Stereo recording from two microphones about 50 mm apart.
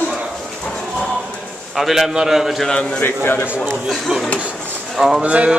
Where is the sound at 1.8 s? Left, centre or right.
Centre.